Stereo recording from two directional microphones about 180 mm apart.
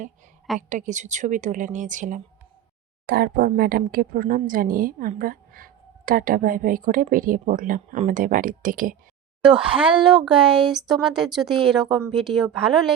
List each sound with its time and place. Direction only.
0.7 s a woman's voice: 45° right (ahead or behind)
3.1 s a woman's voice: 60° right (ahead or behind)
9.4 s speech: 5° right (ahead or behind)